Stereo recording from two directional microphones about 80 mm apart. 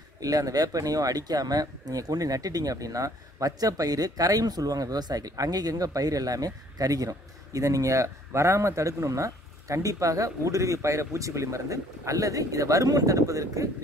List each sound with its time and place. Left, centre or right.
0.2 s speech: right